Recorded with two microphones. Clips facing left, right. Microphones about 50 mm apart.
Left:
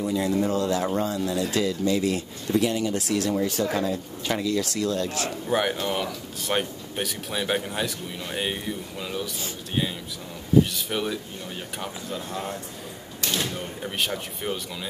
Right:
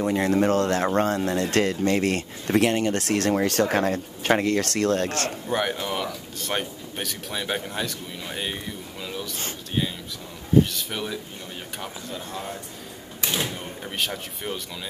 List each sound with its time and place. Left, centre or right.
0.0 s speech: right
5.5 s speech: centre
10.7 s speech: centre
13.2 s door: centre
13.8 s speech: centre